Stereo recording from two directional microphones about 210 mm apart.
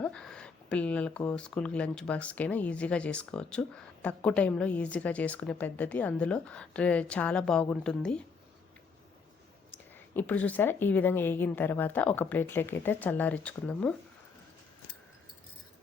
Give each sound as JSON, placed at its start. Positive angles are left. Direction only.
{"t": 0.0, "sound": "speech", "side_deg": 5}
{"t": 9.9, "sound": "speech", "side_deg": 10}